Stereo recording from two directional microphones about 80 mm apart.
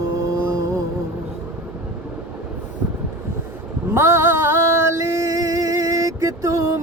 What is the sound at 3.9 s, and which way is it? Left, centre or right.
Music, right.